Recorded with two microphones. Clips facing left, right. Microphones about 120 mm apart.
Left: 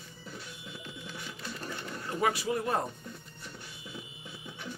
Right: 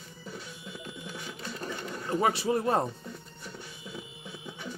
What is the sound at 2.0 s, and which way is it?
Speech, 30° right (ahead or behind).